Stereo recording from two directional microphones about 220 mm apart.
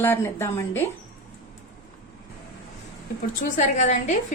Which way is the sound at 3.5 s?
35° left (ahead or behind).